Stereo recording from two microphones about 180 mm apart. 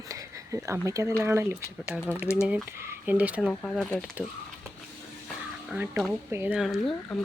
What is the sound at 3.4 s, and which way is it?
Speech, 5° left (ahead or behind).